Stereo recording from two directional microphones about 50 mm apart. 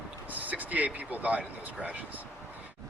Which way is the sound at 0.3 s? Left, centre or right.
Right.